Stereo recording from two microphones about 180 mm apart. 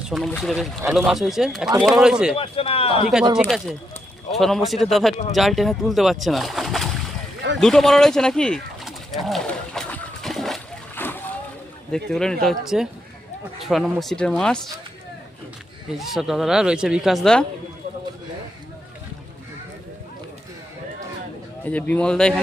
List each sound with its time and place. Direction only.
0.1 s speech: centre (ahead or behind)
2.3 s speech: 30° left (ahead or behind)
4.3 s speech: centre (ahead or behind)
7.6 s pigeon: centre (ahead or behind)
11.9 s speech: 5° left (ahead or behind)
15.9 s speech: centre (ahead or behind)
21.6 s a man's voice: 10° left (ahead or behind)